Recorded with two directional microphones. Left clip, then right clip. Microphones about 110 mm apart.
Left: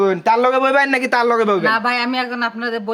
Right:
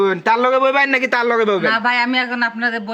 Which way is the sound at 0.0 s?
35° left (ahead or behind).